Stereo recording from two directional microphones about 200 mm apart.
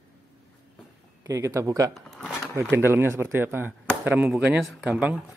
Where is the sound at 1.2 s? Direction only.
15° right (ahead or behind).